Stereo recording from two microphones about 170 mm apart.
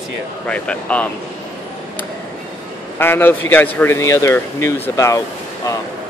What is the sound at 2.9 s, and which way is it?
Speech, 10° left (ahead or behind).